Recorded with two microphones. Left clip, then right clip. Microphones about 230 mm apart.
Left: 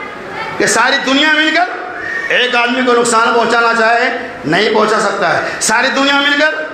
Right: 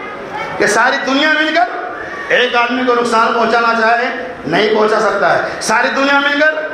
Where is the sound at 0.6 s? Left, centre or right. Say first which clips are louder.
Even; left.